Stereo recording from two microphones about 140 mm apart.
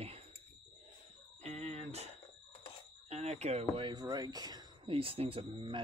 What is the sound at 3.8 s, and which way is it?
Speech, 30° right (ahead or behind).